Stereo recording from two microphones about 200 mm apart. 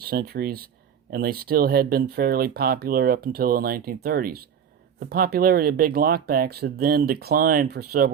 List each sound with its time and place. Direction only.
0.0 s speech: 50° right (ahead or behind)